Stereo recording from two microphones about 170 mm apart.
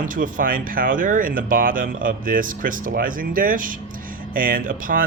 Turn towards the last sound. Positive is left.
turn(degrees=-55)  # may be behind; listen again after turning